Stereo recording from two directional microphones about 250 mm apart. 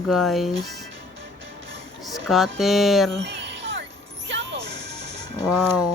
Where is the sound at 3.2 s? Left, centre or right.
Right.